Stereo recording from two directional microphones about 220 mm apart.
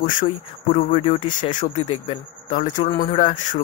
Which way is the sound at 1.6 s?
30° left (ahead or behind).